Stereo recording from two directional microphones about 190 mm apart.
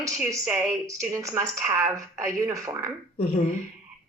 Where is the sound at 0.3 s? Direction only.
15° right (ahead or behind).